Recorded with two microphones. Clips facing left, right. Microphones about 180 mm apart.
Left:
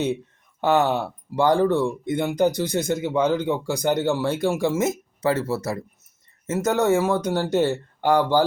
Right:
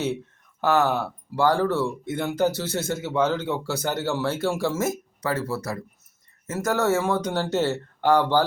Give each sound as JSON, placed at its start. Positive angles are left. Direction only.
{"t": 0.6, "sound": "speech", "side_deg": 20}